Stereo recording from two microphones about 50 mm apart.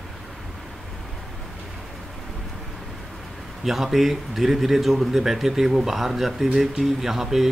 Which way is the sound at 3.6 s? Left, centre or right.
Centre.